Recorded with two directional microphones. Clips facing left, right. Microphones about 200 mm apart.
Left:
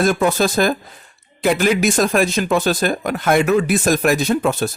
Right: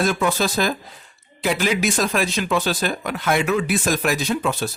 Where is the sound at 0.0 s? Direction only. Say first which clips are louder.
Left 4 dB; 45° left (ahead or behind).